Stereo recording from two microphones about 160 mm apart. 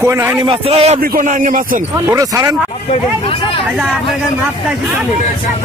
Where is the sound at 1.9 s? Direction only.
20° right (ahead or behind).